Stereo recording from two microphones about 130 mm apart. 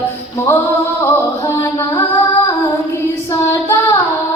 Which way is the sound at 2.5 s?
20° left (ahead or behind).